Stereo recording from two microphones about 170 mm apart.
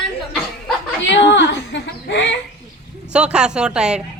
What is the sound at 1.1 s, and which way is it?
Speech, 90° left.